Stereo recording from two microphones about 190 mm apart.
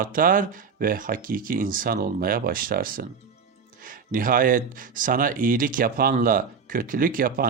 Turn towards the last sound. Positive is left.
turn(degrees=-50)  # may be behind; listen again after turning